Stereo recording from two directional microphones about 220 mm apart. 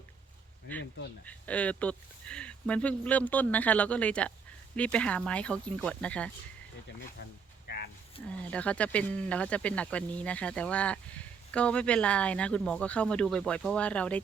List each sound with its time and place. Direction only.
1.2 s speech: 5° left (ahead or behind)
7.2 s speech: 45° left (ahead or behind)
7.7 s a sound: 50° left (ahead or behind)
8.4 s speech: 5° left (ahead or behind)